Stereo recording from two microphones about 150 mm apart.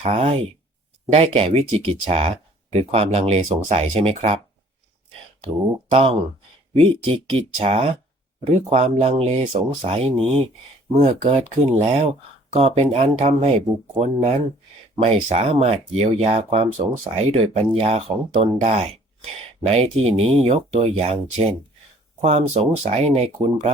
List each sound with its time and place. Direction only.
0.0 s speech: 45° right (ahead or behind)
5.9 s speech: 40° right (ahead or behind)